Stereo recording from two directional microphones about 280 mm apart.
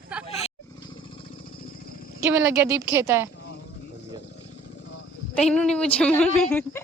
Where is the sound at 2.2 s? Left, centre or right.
Centre.